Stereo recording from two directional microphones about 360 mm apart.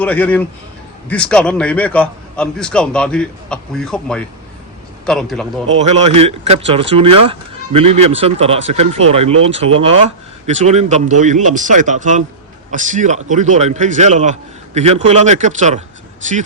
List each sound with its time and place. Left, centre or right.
0.0 s a man's voice: centre
5.7 s speech: centre
7.9 s speech: right
8.1 s speech: centre